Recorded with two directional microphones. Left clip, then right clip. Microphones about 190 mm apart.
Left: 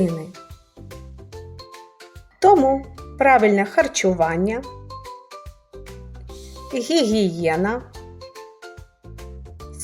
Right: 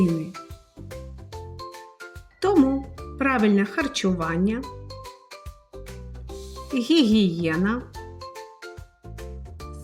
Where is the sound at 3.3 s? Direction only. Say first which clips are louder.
Left 7 dB; 20° left (ahead or behind).